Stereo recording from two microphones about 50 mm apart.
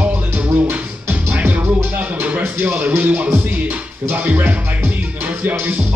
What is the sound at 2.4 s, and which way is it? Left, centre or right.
Music, right.